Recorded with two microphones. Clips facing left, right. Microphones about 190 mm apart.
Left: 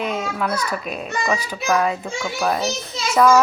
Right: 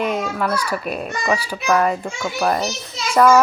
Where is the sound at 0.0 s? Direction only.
5° right (ahead or behind).